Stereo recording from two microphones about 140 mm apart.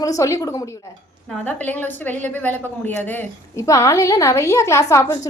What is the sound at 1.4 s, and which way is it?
A woman's voice, 10° left (ahead or behind).